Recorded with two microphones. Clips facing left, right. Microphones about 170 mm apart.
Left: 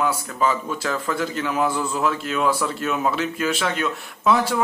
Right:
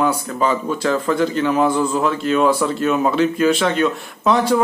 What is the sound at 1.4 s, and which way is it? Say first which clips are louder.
Speech: right 4 dB; 25° right (ahead or behind).